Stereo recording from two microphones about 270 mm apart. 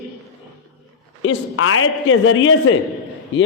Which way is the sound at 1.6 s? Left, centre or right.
Left.